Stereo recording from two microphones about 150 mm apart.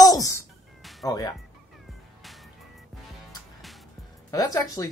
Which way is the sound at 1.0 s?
25° left (ahead or behind).